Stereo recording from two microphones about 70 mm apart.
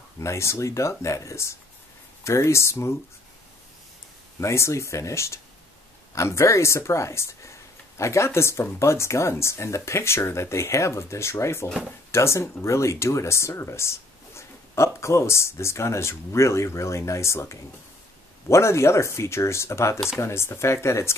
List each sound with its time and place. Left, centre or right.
0.2 s speech: left
4.4 s speech: left